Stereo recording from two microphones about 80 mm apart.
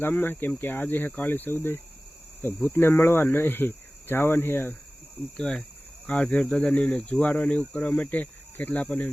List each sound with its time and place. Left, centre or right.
0.0 s speech: left
5.4 s speech: centre